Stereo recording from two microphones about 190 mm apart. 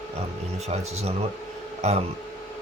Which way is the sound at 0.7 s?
35° right (ahead or behind).